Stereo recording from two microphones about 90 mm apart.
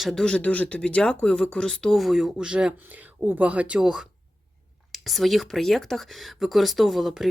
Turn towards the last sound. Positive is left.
turn(degrees=0)  # may be behind; listen again after turning